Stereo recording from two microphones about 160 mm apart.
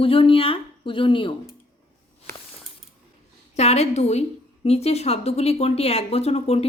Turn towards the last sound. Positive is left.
turn(degrees=40)  # may be behind; listen again after turning